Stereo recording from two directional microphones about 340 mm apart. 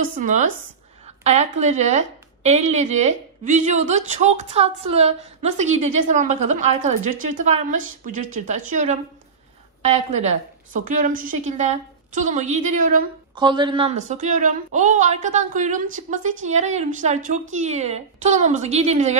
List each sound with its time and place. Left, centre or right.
0.2 s a woman's voice: right